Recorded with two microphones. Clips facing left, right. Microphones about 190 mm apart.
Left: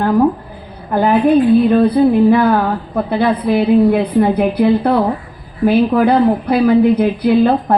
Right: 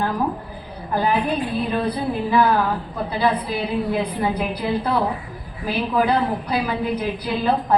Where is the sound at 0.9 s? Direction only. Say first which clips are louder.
Left 7 dB; 55° left (ahead or behind).